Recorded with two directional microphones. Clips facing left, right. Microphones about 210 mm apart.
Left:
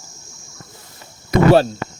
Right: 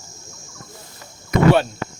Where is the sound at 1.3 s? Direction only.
35° left (ahead or behind).